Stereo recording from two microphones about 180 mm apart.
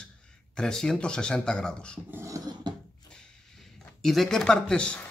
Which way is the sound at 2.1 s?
15° right (ahead or behind).